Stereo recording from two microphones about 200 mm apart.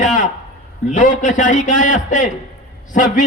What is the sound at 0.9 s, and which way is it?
A man's voice, 40° left (ahead or behind).